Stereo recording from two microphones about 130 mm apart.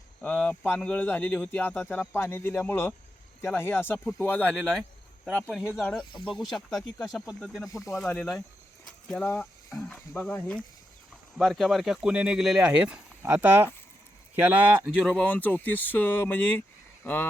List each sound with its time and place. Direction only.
0.2 s speech: 10° left (ahead or behind)
11.3 s speech: centre (ahead or behind); by 13.7 s 15° right (ahead or behind)
15.0 s speech: 10° left (ahead or behind)